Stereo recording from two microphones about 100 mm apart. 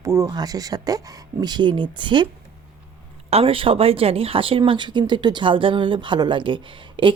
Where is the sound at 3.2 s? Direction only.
80° right.